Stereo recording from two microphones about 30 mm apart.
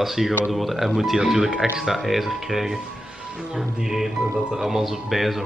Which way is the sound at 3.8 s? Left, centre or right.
Centre.